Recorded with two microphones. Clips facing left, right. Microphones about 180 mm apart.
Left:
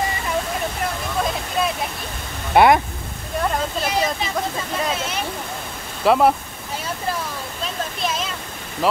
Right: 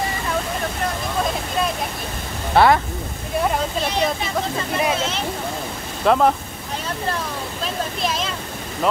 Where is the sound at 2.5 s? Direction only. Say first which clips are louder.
Left 1 dB; 15° left (ahead or behind).